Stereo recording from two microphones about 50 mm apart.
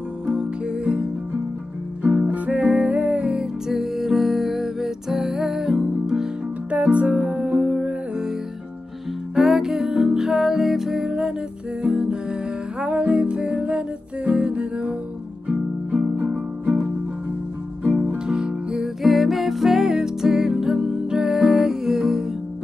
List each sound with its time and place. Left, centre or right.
0.3 s music: centre
2.0 s music: right
3.6 s music: centre
6.7 s music: right
9.3 s music: centre; by 16.8 s right
18.0 s music: centre
19.0 s music: centre